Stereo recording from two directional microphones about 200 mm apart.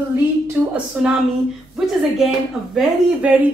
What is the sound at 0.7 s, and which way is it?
A woman's voice, 5° right (ahead or behind).